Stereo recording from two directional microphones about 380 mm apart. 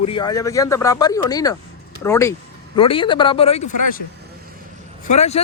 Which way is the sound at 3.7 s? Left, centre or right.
Left.